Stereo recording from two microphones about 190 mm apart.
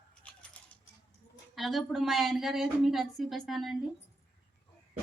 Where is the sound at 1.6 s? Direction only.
Centre (ahead or behind).